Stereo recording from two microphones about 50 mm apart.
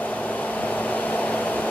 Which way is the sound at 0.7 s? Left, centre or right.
Left.